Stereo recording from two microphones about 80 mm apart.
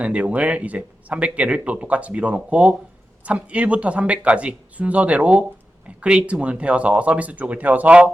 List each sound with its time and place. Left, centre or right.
0.0 s speech: centre